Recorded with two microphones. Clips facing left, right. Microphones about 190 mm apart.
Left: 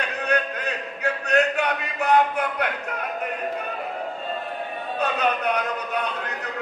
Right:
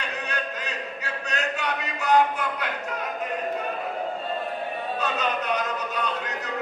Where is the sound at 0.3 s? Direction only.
60° left (ahead or behind).